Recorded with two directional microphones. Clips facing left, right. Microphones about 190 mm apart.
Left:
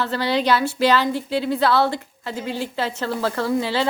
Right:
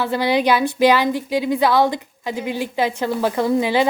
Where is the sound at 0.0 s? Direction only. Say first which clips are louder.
Right 3 dB; 15° right (ahead or behind).